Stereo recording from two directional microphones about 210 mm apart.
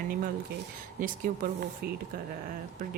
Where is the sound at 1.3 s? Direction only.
40° right (ahead or behind).